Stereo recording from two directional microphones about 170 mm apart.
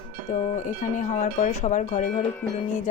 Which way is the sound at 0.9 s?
45° left (ahead or behind).